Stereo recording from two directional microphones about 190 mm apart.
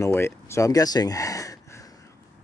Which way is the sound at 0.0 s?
15° left (ahead or behind).